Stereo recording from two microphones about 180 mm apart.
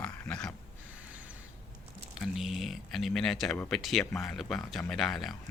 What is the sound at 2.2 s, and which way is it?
Speech, centre (ahead or behind).